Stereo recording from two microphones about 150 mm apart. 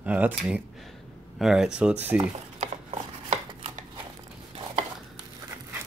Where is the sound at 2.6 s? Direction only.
45° right (ahead or behind).